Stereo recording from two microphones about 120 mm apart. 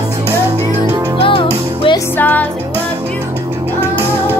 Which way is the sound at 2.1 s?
15° left (ahead or behind).